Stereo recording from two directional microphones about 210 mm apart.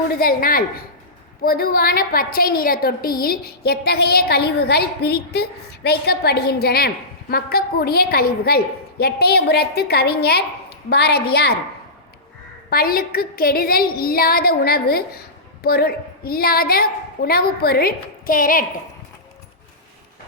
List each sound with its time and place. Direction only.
0.1 s a woman's voice: 45° left (ahead or behind)
12.7 s a woman's voice: 45° left (ahead or behind)